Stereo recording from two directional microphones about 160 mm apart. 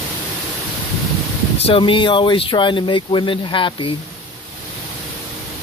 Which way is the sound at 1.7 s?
35° left (ahead or behind).